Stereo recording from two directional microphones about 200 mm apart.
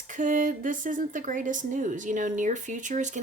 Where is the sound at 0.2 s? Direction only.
40° right (ahead or behind).